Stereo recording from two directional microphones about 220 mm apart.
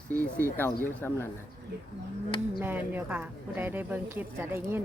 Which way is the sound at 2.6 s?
10° right (ahead or behind).